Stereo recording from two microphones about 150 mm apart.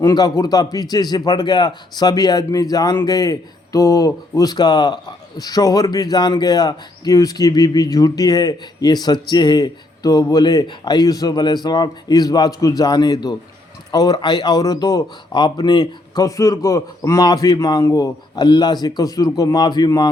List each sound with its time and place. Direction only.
0.0 s a man's voice: 25° left (ahead or behind)